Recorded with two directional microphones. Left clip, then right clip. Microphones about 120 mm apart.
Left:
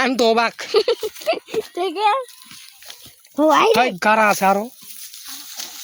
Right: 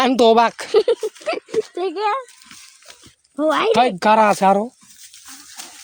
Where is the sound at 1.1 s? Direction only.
30° left (ahead or behind).